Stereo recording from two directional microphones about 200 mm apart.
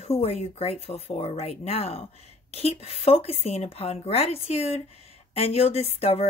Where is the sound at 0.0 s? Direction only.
30° left (ahead or behind).